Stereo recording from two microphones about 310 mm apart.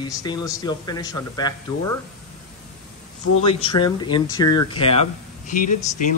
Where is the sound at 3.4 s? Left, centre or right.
Centre.